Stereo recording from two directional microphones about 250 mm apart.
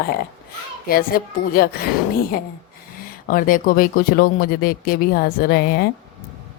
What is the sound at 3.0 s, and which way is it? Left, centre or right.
Speech, left.